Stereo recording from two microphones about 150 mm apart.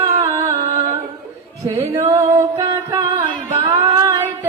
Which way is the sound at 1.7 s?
15° right (ahead or behind).